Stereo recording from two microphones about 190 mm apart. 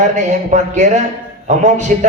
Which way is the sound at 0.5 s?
40° right (ahead or behind).